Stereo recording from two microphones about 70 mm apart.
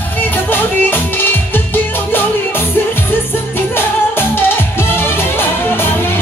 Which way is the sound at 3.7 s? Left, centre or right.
Left.